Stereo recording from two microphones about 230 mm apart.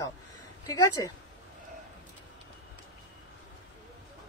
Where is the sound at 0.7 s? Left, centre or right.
Centre.